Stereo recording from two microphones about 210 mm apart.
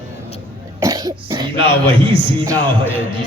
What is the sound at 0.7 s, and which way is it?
Cough, 15° right (ahead or behind).